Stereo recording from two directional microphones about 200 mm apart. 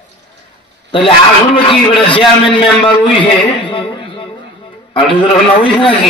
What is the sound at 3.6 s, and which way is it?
Speech, 25° left (ahead or behind).